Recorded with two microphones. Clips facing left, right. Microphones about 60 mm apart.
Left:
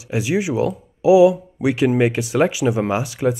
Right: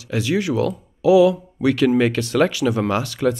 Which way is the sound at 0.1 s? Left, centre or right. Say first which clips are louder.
Even; centre.